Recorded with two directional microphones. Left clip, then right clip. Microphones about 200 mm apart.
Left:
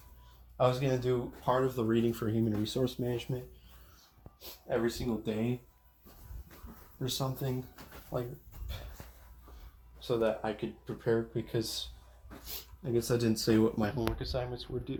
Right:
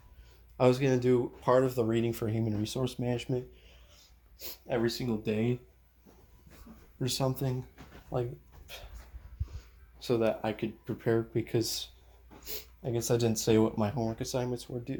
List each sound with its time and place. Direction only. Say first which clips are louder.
0.5 s speech: right 3 dB; 45° right (ahead or behind)
4.4 s speech: right 1 dB; 35° right (ahead or behind)
8.1 s speech: right 3 dB; 45° right (ahead or behind)
10.0 s speech: right 2 dB; 40° right (ahead or behind); by 14.9 s 55° right (ahead or behind)